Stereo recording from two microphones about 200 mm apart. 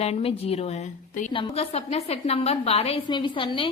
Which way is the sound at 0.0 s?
30° left (ahead or behind).